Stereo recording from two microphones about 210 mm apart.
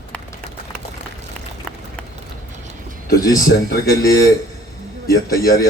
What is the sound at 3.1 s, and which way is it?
Speech, 45° left (ahead or behind).